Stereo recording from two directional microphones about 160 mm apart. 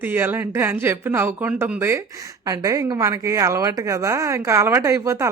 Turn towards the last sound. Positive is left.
turn(degrees=-20)  # may be behind; listen again after turning